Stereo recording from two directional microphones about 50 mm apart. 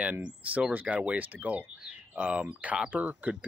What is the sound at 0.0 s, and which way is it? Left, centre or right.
Speech, right.